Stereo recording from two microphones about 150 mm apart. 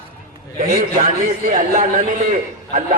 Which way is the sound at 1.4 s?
60° right (ahead or behind).